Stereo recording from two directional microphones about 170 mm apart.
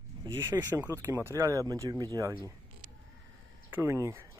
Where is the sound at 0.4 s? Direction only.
15° right (ahead or behind).